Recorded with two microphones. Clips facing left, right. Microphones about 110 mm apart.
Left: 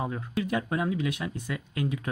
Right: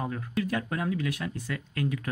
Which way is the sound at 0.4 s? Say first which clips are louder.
Left 2 dB; 15° left (ahead or behind).